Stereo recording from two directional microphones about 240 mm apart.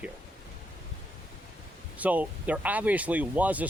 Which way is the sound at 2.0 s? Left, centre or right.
Centre.